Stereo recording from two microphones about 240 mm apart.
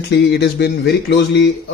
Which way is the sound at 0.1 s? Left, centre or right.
Left.